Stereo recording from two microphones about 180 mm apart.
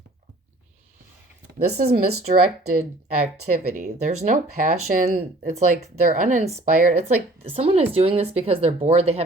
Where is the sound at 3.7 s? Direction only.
40° right (ahead or behind).